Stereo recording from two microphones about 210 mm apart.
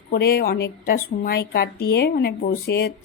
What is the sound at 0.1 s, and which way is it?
A woman's voice, 50° left (ahead or behind).